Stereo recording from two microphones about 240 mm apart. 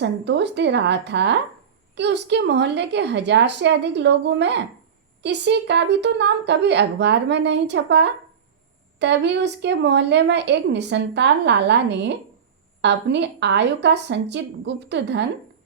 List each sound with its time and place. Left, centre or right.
0.0 s a woman's voice: right